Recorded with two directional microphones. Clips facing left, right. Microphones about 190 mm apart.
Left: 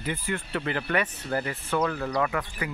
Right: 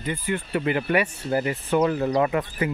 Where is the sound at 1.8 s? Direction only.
25° right (ahead or behind).